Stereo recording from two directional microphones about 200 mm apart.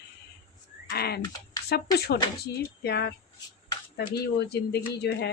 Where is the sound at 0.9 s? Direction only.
50° left (ahead or behind).